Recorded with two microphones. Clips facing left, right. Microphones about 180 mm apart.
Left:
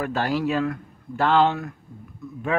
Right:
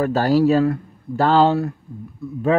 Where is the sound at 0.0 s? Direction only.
35° right (ahead or behind).